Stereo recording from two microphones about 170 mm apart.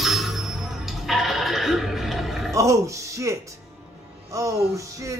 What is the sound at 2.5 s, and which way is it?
Speech, 20° right (ahead or behind).